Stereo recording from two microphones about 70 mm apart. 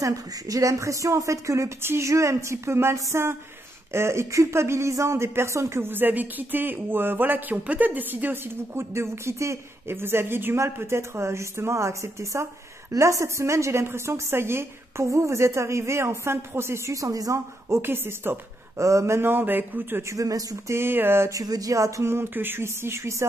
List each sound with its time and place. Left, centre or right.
0.0 s a woman's voice: right
17.6 s a woman's voice: right
20.1 s speech: right
20.7 s a woman's voice: right
21.3 s a woman's voice: right